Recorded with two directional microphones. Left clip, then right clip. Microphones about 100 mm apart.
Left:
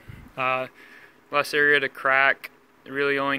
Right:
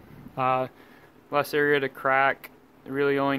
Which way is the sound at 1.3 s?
10° right (ahead or behind).